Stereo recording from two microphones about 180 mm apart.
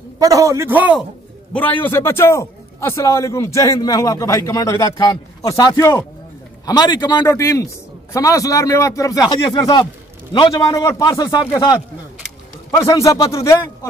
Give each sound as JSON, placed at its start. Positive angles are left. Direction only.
{"t": 0.2, "sound": "a man's voice", "side_deg": -20}
{"t": 1.5, "sound": "a man's voice", "side_deg": 10}